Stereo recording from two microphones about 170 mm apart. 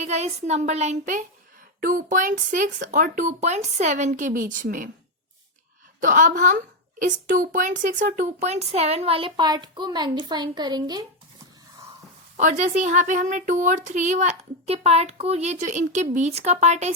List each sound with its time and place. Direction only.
0.0 s speech: 40° right (ahead or behind)
1.8 s speech: 55° right (ahead or behind)
6.0 s speech: 50° right (ahead or behind); by 11.0 s 25° right (ahead or behind)
12.4 s speech: 45° right (ahead or behind)